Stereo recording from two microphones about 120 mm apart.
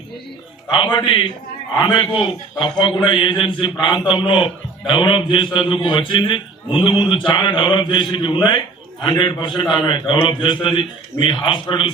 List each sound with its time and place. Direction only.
0.9 s a man's voice: 40° left (ahead or behind)